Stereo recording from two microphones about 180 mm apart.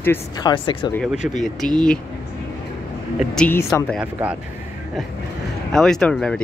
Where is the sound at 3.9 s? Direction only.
5° right (ahead or behind).